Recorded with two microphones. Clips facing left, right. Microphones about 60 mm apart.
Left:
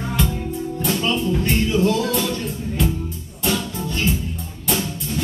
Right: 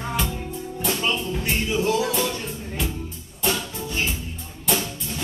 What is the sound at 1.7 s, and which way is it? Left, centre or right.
Music, centre.